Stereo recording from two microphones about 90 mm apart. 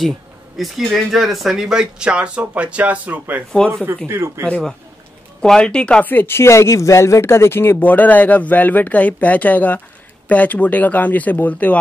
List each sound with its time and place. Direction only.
0.6 s speech: centre (ahead or behind); by 3.4 s 20° right (ahead or behind)
4.1 s speech: 30° right (ahead or behind)
4.5 s speech: 10° left (ahead or behind)